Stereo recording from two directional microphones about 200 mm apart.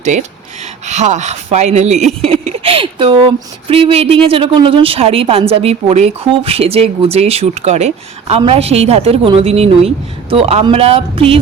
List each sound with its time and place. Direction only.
0.0 s speech: 35° right (ahead or behind)